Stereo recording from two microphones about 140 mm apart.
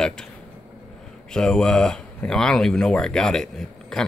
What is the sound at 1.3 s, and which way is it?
Speech, 5° left (ahead or behind).